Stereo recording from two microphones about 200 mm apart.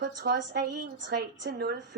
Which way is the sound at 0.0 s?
55° right (ahead or behind).